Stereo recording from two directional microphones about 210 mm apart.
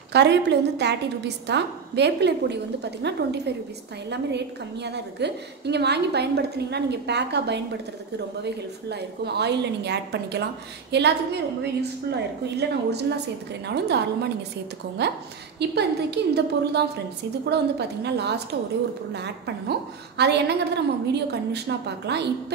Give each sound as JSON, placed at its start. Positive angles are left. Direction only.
{"t": 0.1, "sound": "a woman's voice", "side_deg": -55}
{"t": 8.8, "sound": "a woman's voice", "side_deg": -50}